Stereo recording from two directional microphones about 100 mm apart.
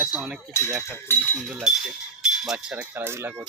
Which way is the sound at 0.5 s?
25° left (ahead or behind).